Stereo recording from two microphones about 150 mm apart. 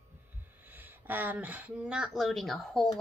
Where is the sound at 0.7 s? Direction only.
10° right (ahead or behind).